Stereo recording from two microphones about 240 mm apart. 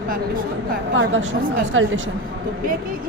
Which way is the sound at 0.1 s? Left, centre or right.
Right.